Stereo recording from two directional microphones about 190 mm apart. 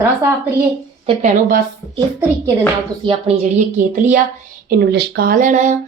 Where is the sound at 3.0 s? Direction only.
30° right (ahead or behind).